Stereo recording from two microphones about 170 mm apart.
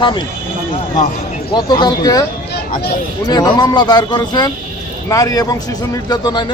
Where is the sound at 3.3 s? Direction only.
25° left (ahead or behind).